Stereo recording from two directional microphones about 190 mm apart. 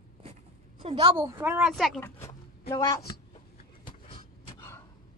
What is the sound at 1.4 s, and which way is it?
Speech, 10° right (ahead or behind).